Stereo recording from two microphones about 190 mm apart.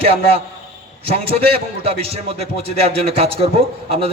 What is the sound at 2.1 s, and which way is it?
A man's voice, 30° right (ahead or behind).